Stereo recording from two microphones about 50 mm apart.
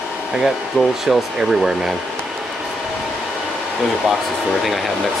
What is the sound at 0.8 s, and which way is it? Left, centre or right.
Speech, centre.